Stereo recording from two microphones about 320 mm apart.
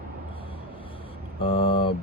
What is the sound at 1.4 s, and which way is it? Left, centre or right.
Speech, centre.